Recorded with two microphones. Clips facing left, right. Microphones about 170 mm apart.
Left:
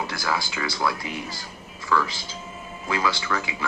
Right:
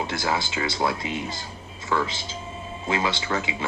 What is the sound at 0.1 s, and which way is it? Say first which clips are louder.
Speech: right 2 dB; 25° right (ahead or behind).